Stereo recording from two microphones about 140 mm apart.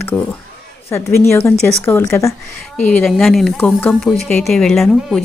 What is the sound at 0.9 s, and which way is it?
A woman's voice, 20° left (ahead or behind).